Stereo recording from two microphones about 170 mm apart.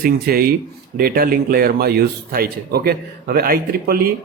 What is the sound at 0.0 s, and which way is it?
A man's voice, 60° right (ahead or behind).